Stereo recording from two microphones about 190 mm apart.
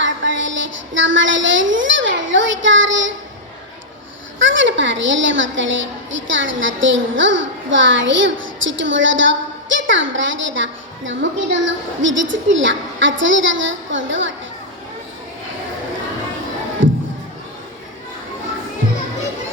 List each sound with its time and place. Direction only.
0.0 s child singing: 75° right (ahead or behind)
4.4 s a woman's voice: 75° right (ahead or behind)